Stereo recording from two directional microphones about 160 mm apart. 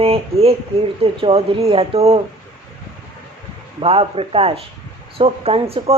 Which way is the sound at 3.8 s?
35° right (ahead or behind).